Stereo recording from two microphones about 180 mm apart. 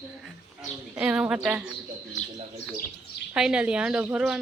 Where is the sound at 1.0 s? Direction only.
5° right (ahead or behind).